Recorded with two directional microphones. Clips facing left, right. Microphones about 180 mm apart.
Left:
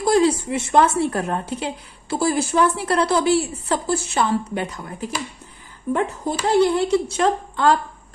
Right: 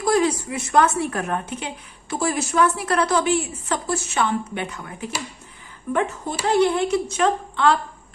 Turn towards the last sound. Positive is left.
turn(degrees=40)  # may be behind; listen again after turning